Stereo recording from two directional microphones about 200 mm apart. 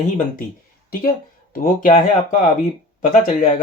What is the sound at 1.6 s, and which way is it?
Speech, 45° left (ahead or behind).